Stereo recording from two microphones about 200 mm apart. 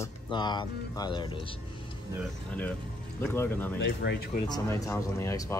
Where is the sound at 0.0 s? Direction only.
20° left (ahead or behind).